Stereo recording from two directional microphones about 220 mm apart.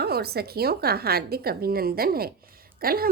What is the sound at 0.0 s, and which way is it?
Speech, 45° right (ahead or behind).